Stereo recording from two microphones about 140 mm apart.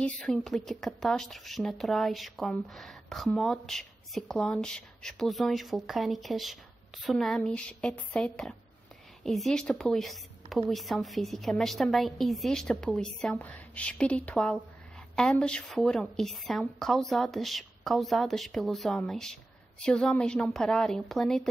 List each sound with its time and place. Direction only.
0.0 s a woman's voice: 5° left (ahead or behind)